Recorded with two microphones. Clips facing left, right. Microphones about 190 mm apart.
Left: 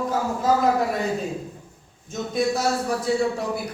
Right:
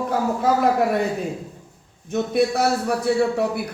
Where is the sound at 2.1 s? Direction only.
65° right (ahead or behind).